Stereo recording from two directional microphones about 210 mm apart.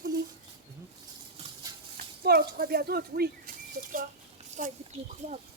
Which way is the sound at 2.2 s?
45° right (ahead or behind).